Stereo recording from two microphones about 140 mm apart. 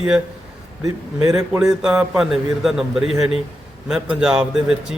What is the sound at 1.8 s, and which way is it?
Speech, 5° right (ahead or behind).